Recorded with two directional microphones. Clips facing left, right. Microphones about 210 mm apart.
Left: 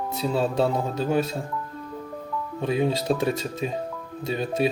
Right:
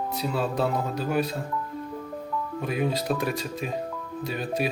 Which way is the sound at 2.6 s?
25° left (ahead or behind).